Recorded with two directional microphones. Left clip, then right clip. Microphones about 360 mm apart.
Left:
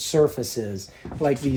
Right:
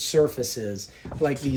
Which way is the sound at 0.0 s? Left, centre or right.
Centre.